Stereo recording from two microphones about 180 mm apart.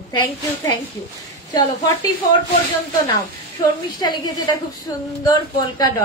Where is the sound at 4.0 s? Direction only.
20° left (ahead or behind).